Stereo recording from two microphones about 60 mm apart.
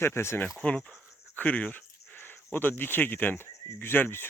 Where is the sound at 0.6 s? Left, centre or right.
Centre.